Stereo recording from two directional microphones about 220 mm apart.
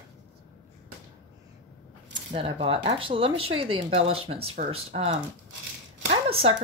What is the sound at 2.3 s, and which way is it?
Speech, 25° right (ahead or behind).